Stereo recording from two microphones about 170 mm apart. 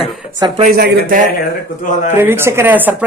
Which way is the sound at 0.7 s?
70° right (ahead or behind).